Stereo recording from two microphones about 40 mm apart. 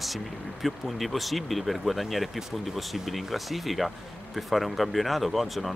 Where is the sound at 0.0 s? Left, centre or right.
Centre.